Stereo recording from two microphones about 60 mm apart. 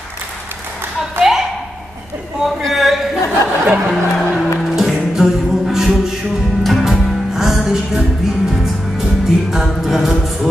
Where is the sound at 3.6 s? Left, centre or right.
Right.